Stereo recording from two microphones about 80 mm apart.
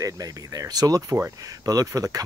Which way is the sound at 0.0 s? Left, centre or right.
Right.